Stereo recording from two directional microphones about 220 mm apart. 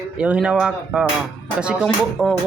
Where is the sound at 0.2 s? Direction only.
5° right (ahead or behind).